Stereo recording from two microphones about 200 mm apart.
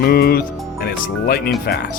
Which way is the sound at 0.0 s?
50° left (ahead or behind).